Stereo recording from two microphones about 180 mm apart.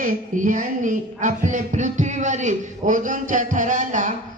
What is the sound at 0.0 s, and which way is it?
Music, 45° right (ahead or behind).